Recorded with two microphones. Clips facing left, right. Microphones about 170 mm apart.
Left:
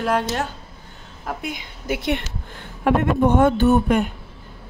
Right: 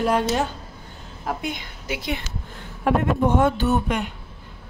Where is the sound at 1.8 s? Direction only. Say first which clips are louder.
Left 6 dB; 60° left (ahead or behind).